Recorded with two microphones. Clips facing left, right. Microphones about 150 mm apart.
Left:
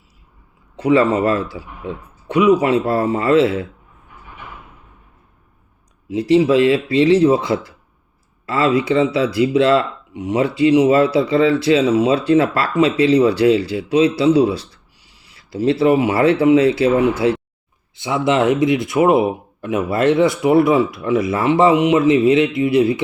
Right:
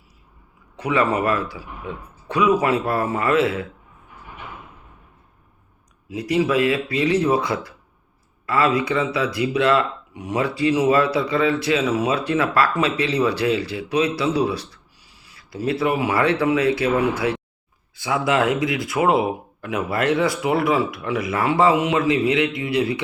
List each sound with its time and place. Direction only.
0.8 s speech: 30° left (ahead or behind)
6.1 s speech: 25° left (ahead or behind)